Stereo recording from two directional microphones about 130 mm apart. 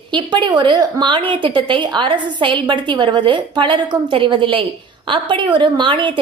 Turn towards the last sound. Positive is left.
turn(degrees=-40)  # may be behind; listen again after turning